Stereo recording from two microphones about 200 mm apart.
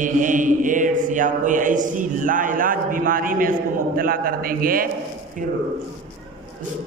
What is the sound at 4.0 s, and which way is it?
Speech, 45° right (ahead or behind).